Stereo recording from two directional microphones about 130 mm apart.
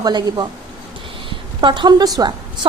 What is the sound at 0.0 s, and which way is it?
A woman's voice, 30° right (ahead or behind).